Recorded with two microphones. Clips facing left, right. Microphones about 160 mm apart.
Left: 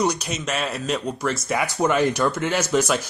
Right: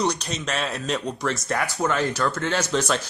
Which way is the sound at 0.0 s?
5° left (ahead or behind).